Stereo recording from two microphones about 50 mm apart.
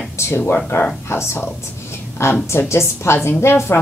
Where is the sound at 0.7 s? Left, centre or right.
Left.